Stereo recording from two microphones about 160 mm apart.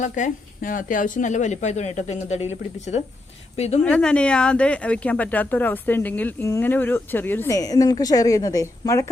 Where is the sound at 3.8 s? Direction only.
5° left (ahead or behind).